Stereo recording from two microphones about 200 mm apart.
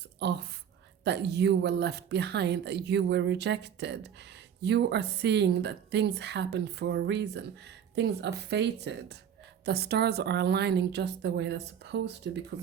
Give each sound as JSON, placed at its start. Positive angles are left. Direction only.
{"t": 0.2, "sound": "a woman's voice", "side_deg": -55}